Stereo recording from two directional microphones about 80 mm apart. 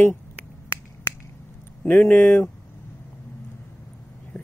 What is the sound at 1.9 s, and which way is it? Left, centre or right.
Speech, left.